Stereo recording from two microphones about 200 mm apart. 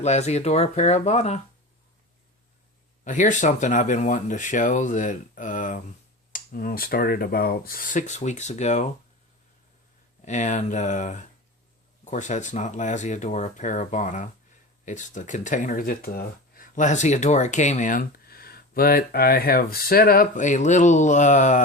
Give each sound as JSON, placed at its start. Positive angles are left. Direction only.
{"t": 0.0, "sound": "speech", "side_deg": 35}
{"t": 3.0, "sound": "speech", "side_deg": 40}
{"t": 10.2, "sound": "speech", "side_deg": 35}